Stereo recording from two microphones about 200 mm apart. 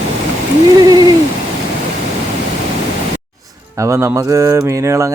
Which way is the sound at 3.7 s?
15° right (ahead or behind).